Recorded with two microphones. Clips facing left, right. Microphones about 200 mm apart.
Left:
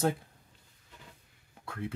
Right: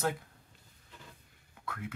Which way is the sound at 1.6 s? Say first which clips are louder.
Left 3 dB; 30° left (ahead or behind).